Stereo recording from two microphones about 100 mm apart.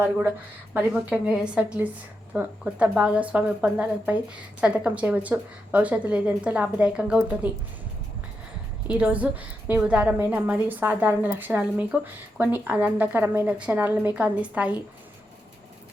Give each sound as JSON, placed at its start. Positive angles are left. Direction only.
{"t": 0.7, "sound": "a woman's voice", "side_deg": -15}
{"t": 8.9, "sound": "a woman's voice", "side_deg": -15}